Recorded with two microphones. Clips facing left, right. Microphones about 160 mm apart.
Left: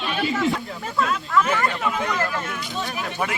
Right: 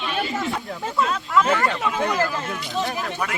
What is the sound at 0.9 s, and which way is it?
Speech, 20° right (ahead or behind).